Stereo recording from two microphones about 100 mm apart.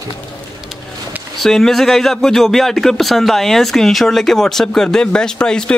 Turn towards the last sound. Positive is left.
turn(degrees=10)  # may be behind; listen again after turning